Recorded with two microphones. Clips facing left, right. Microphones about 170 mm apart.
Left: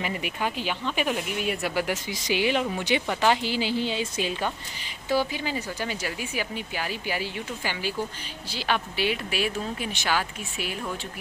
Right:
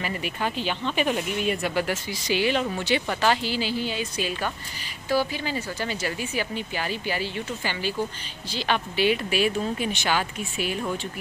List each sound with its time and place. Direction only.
0.0 s speech: 15° left (ahead or behind)